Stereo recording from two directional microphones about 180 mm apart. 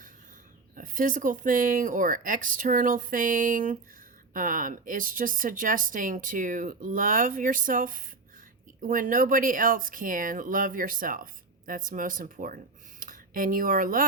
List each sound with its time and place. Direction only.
0.8 s speech: 50° right (ahead or behind)